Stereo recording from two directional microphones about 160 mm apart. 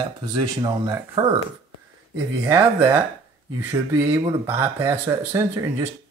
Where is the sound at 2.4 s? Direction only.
15° right (ahead or behind).